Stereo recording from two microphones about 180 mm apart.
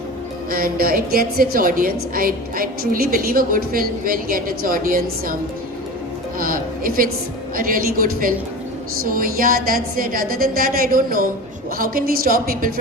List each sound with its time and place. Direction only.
0.5 s a woman's voice: 55° right (ahead or behind)
6.4 s a woman's voice: 50° right (ahead or behind)